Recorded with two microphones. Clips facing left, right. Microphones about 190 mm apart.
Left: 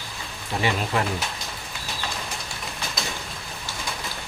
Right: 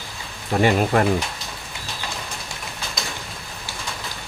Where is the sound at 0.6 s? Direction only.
50° right (ahead or behind).